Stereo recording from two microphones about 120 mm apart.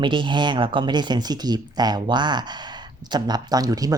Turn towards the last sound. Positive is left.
turn(degrees=-30)  # may be behind; listen again after turning